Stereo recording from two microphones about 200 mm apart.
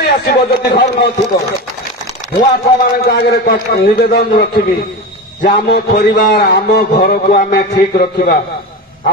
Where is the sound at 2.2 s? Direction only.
35° left (ahead or behind).